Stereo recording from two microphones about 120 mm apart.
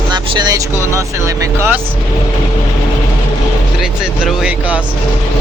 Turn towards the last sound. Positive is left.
turn(degrees=-10)  # may be behind; listen again after turning